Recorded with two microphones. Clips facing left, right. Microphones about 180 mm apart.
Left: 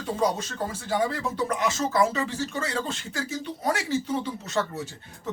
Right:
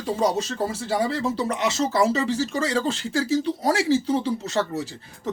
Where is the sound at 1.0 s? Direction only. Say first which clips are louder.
Right 2 dB; 30° right (ahead or behind).